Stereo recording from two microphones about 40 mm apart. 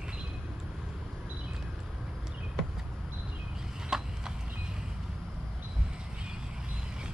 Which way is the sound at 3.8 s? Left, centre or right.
Centre.